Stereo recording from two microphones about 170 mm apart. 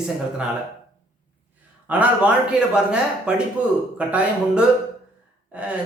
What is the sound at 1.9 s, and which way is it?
A man's voice, 10° right (ahead or behind).